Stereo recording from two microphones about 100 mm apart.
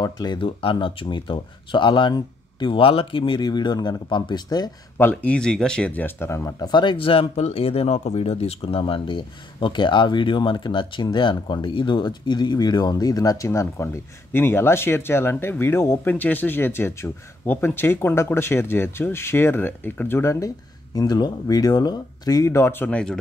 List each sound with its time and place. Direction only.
0.0 s speech: 45° left (ahead or behind)
4.9 s speech: 20° left (ahead or behind)
6.6 s speech: 50° left (ahead or behind); by 22.8 s 25° left (ahead or behind)
22.8 s speech: 10° left (ahead or behind)